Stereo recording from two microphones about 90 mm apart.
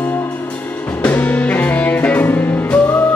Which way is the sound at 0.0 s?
20° left (ahead or behind).